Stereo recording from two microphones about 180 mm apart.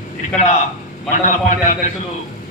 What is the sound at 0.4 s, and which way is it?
A man's voice, 45° left (ahead or behind).